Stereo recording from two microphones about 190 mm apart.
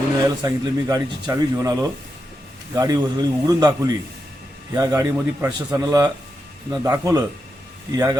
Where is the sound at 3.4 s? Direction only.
20° right (ahead or behind).